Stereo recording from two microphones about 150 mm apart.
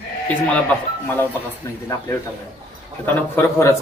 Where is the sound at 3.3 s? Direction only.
20° left (ahead or behind).